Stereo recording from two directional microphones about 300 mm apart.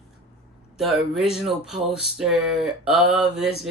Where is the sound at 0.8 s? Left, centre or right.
Centre.